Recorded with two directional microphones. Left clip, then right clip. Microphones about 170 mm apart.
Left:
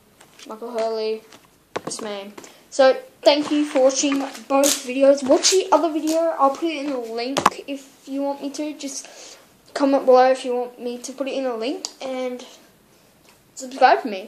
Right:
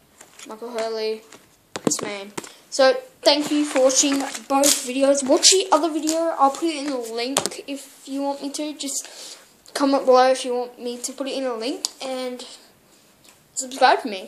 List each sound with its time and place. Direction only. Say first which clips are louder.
0.5 s speech: left 3 dB; 30° right (ahead or behind)
6.2 s speech: right 2 dB; 45° right (ahead or behind)
7.2 s speech: left 9 dB; 25° right (ahead or behind)
13.6 s speech: left 1 dB; 25° right (ahead or behind)